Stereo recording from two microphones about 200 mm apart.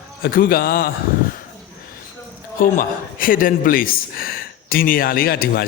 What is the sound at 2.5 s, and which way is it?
Speech, 45° left (ahead or behind).